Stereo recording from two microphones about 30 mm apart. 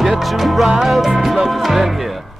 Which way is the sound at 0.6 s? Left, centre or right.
Centre.